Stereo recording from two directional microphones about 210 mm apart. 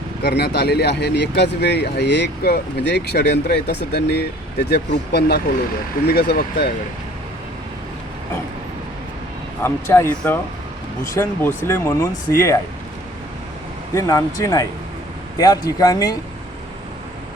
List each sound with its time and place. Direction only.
0.2 s speech: 50° left (ahead or behind)
9.6 s speech: 10° left (ahead or behind)
13.9 s speech: 15° left (ahead or behind)